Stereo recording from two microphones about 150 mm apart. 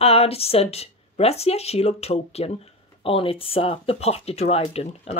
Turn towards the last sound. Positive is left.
turn(degrees=40)  # may be behind; listen again after turning